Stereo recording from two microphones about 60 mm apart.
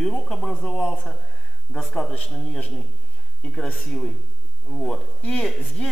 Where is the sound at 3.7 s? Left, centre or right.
Centre.